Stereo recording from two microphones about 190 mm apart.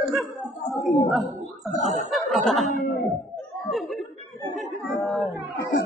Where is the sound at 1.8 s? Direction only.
35° right (ahead or behind).